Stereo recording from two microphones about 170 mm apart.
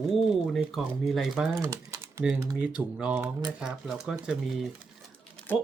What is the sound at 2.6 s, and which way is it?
Speech, 5° right (ahead or behind).